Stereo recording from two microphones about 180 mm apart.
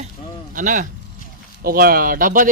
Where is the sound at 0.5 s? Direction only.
50° right (ahead or behind).